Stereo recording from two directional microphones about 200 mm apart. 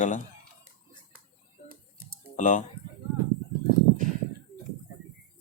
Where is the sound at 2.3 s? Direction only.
40° left (ahead or behind).